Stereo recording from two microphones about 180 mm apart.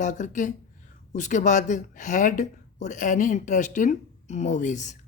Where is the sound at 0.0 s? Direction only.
45° left (ahead or behind).